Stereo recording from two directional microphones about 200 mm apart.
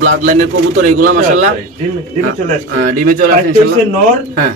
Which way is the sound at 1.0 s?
90° right.